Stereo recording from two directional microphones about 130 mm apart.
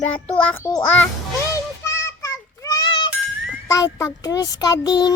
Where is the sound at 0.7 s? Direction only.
25° left (ahead or behind).